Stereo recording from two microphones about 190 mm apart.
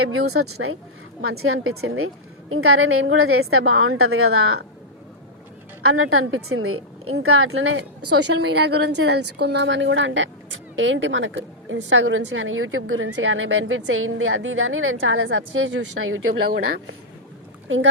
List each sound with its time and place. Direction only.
0.3 s a woman's voice: 90° right
5.8 s a woman's voice: 90° right
16.5 s speech: 55° right (ahead or behind)